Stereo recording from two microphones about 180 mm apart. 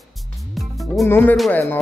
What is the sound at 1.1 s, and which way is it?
Speech, 10° left (ahead or behind).